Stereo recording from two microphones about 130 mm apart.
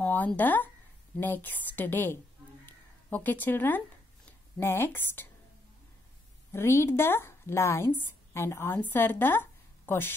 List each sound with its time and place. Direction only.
0.0 s a woman's voice: 10° left (ahead or behind)
2.6 s a sound: 15° left (ahead or behind)
4.3 s speech: 20° left (ahead or behind)
6.5 s a woman's voice: 20° left (ahead or behind)